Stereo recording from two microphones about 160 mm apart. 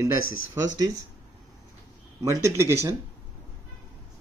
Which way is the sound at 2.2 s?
20° right (ahead or behind).